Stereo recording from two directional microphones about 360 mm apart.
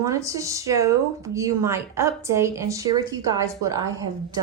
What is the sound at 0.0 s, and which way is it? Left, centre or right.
Speech, centre.